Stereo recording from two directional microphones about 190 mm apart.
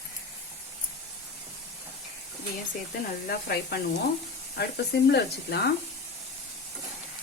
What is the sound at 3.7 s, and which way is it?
Speech, 60° left (ahead or behind).